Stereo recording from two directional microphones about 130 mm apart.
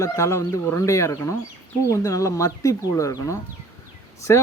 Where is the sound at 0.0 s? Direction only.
20° left (ahead or behind).